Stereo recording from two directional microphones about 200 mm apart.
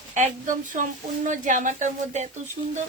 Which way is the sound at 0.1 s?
40° right (ahead or behind).